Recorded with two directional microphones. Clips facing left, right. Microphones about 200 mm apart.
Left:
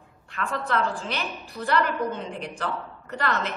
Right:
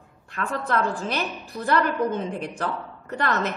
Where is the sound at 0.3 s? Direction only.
45° right (ahead or behind).